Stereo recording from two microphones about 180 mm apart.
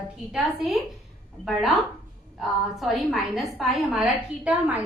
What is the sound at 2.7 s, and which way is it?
A woman's voice, centre (ahead or behind).